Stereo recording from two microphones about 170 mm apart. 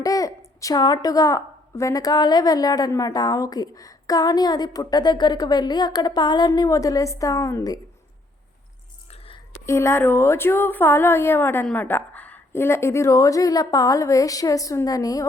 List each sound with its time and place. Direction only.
0.0 s a woman's voice: 20° left (ahead or behind)
9.6 s a woman's voice: 15° left (ahead or behind)